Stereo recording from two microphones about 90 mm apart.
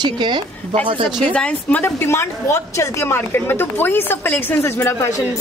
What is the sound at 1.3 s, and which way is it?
A woman's voice, 15° left (ahead or behind).